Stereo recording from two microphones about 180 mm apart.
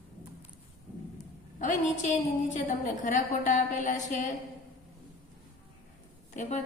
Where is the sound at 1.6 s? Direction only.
45° left (ahead or behind).